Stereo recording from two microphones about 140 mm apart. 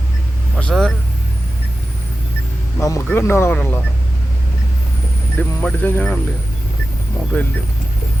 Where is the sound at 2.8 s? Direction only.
20° left (ahead or behind).